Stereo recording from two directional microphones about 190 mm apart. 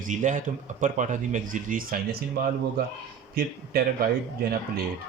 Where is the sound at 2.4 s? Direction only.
55° right (ahead or behind).